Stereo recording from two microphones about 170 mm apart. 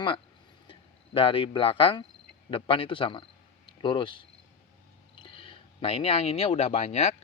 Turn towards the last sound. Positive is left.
turn(degrees=40)  # may be behind; listen again after turning